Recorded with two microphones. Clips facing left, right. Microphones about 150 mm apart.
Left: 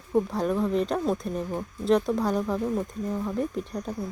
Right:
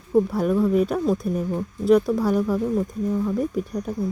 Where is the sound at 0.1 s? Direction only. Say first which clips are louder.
Right 5 dB; 5° right (ahead or behind).